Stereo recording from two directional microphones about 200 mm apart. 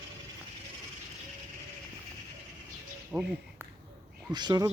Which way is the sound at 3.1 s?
10° right (ahead or behind).